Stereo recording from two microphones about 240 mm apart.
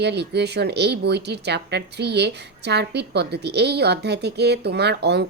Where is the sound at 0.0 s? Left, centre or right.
Right.